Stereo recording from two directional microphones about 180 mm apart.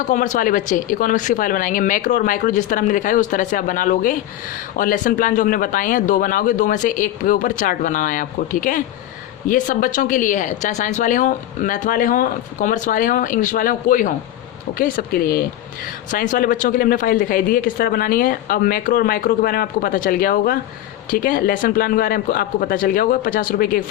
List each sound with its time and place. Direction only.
0.1 s speech: 45° left (ahead or behind)